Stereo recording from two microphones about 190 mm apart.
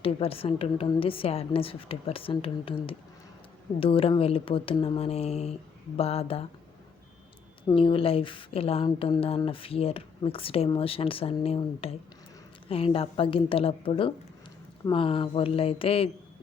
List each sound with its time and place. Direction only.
0.0 s a woman's voice: 30° left (ahead or behind)
7.7 s a woman's voice: 25° left (ahead or behind)